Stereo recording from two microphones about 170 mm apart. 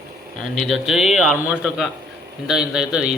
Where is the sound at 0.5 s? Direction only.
Centre (ahead or behind).